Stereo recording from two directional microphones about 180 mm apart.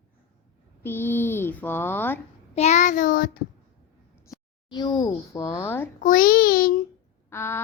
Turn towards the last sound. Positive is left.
turn(degrees=15)  # may be behind; listen again after turning